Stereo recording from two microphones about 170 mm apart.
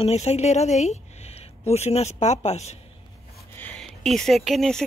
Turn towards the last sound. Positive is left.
turn(degrees=0)  # may be behind; listen again after turning